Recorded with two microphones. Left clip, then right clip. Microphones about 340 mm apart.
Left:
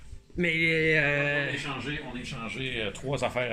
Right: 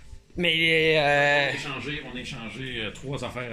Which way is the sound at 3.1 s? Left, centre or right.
Left.